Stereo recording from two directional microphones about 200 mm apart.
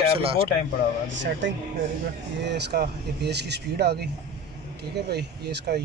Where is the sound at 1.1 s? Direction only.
65° right (ahead or behind).